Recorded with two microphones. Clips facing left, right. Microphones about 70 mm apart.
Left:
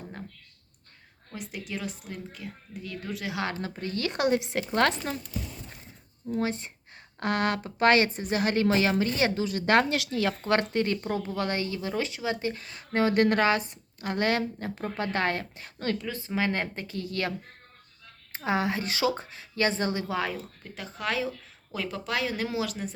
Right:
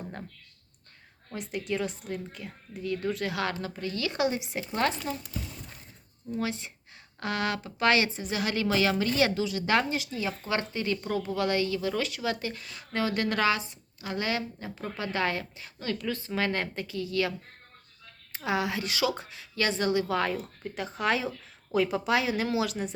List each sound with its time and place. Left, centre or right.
1.3 s a woman's voice: centre
3.3 s speech: left
4.4 s speech: left
6.3 s speech: left
9.9 s speech: left
11.0 s speech: left
16.0 s speech: centre
16.8 s speech: left
18.3 s speech: left
20.7 s a woman's voice: centre